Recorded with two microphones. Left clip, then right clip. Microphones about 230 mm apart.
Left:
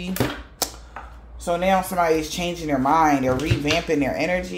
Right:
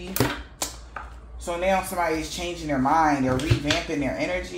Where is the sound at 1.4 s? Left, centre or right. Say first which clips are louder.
Left 3 dB; left.